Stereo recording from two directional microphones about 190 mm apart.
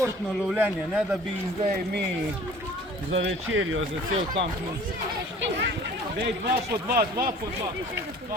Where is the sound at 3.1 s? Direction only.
90° right.